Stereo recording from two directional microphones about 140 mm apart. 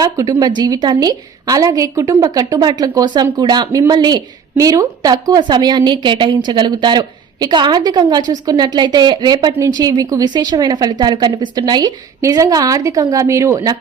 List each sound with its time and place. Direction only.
0.0 s a woman's voice: 25° right (ahead or behind)